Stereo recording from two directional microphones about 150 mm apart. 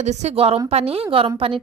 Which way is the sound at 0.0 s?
40° right (ahead or behind).